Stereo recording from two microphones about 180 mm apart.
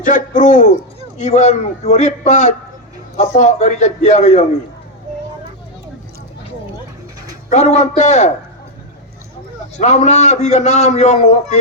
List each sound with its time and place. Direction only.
0.0 s a man's voice: 45° left (ahead or behind)
7.5 s a man's voice: 40° left (ahead or behind)
9.7 s a man's voice: 40° left (ahead or behind)